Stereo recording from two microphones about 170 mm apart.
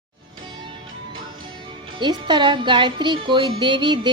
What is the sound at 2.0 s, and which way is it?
Speech, 25° right (ahead or behind).